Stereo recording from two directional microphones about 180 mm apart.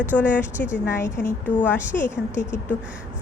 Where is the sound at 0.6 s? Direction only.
60° left (ahead or behind).